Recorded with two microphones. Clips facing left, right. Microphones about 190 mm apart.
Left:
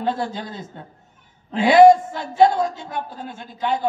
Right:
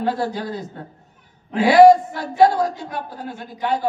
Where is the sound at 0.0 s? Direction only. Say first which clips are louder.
Right 2 dB; 20° left (ahead or behind).